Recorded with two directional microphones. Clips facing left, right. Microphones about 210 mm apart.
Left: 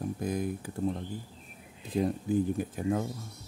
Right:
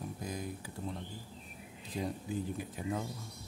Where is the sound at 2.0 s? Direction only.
50° left (ahead or behind).